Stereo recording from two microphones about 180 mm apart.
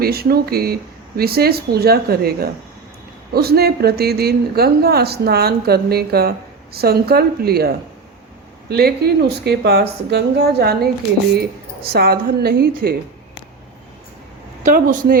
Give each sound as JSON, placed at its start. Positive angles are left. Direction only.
{"t": 0.0, "sound": "a woman's voice", "side_deg": -60}
{"t": 8.7, "sound": "a woman's voice", "side_deg": -65}
{"t": 11.9, "sound": "a woman's voice", "side_deg": -60}
{"t": 14.6, "sound": "speech", "side_deg": -50}